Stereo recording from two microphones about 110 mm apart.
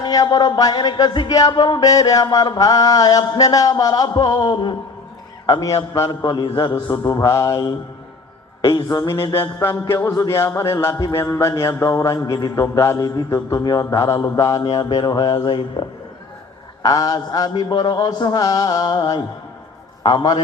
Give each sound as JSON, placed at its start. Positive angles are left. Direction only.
{"t": 0.0, "sound": "a man's voice", "side_deg": 40}
{"t": 5.5, "sound": "a man's voice", "side_deg": 30}
{"t": 9.0, "sound": "a sound", "side_deg": 25}
{"t": 14.3, "sound": "a man's voice", "side_deg": 30}
{"t": 16.8, "sound": "a man's voice", "side_deg": 35}